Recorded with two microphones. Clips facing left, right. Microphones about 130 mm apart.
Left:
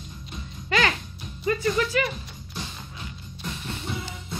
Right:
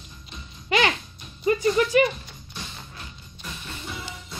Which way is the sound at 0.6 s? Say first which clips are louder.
Right 2 dB; 20° right (ahead or behind).